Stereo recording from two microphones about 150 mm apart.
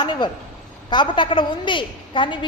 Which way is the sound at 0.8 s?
30° left (ahead or behind).